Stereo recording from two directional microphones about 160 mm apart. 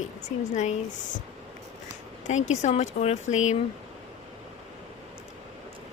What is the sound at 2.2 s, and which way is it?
A woman's voice, 45° left (ahead or behind).